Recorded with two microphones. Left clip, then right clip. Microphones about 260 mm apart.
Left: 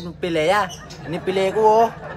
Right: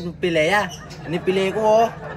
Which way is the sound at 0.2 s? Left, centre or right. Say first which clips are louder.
Even; centre.